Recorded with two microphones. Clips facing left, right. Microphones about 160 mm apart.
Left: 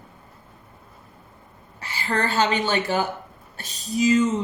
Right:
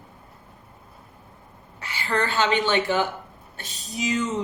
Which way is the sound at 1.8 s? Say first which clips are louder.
Even; 35° left (ahead or behind).